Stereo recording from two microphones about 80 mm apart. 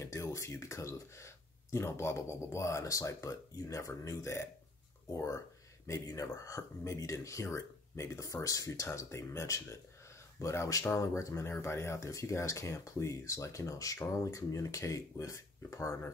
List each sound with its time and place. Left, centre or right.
0.0 s speech: left